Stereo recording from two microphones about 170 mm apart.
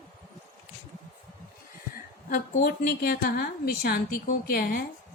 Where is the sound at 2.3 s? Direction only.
55° left (ahead or behind).